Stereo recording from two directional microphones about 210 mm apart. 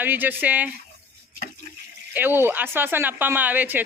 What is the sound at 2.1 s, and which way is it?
Speech, 10° right (ahead or behind).